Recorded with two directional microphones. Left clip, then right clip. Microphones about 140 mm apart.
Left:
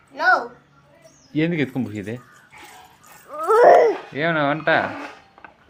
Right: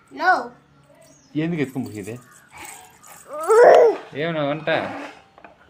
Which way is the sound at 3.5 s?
10° left (ahead or behind).